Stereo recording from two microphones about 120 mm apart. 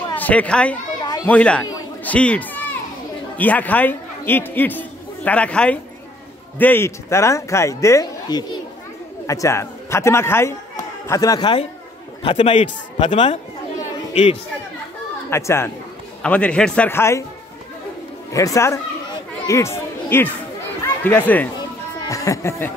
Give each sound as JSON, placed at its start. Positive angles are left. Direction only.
{"t": 0.1, "sound": "speech", "side_deg": 15}
{"t": 1.0, "sound": "children playing", "side_deg": 35}
{"t": 1.3, "sound": "speech", "side_deg": 10}
{"t": 2.0, "sound": "a sound", "side_deg": 10}
{"t": 3.3, "sound": "a man's voice", "side_deg": 15}
{"t": 12.4, "sound": "a man's voice", "side_deg": 70}
{"t": 13.0, "sound": "speech", "side_deg": 45}
{"t": 15.2, "sound": "speech", "side_deg": 20}
{"t": 16.2, "sound": "speech", "side_deg": 10}
{"t": 16.9, "sound": "speech", "side_deg": 20}
{"t": 18.3, "sound": "speech", "side_deg": 25}
{"t": 21.5, "sound": "music", "side_deg": 30}